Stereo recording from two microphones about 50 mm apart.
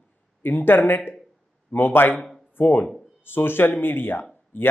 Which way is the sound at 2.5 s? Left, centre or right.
Left.